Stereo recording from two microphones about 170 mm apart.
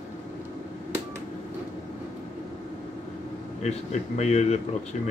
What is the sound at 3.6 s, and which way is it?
Speech, 40° left (ahead or behind).